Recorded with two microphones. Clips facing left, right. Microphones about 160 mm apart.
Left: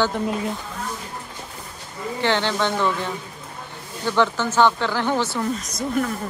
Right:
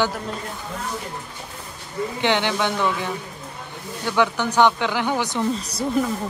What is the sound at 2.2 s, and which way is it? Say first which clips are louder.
Speech: even; 15° right (ahead or behind).